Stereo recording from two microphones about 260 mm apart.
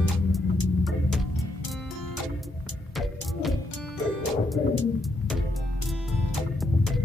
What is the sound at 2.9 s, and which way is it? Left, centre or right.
Music, centre.